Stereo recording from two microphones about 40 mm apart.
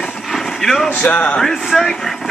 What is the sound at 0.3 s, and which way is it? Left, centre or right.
Vehicle, centre.